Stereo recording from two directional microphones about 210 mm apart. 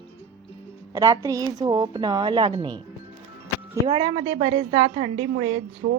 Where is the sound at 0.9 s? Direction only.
15° right (ahead or behind).